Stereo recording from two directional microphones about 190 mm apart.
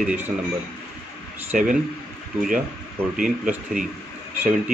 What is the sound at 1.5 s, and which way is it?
Speech, 45° right (ahead or behind).